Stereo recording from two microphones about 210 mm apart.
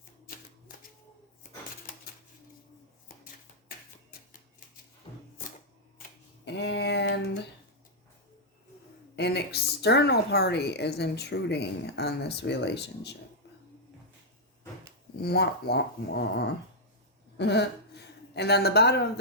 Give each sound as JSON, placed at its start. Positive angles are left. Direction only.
{"t": 6.0, "sound": "speech", "side_deg": 55}
{"t": 9.1, "sound": "a woman's voice", "side_deg": 50}
{"t": 15.2, "sound": "a woman's voice", "side_deg": 50}